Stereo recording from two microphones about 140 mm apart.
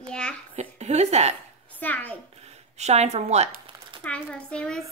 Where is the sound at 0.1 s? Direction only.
5° left (ahead or behind).